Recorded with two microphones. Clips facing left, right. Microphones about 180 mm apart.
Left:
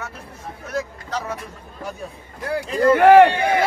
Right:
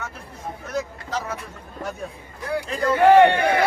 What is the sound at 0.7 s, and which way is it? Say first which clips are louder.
Vehicle: left 2 dB; centre (ahead or behind).